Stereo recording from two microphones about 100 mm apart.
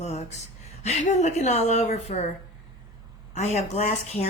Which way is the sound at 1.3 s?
90° left.